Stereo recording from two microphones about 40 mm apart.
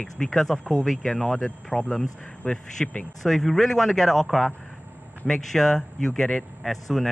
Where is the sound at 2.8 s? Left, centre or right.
Centre.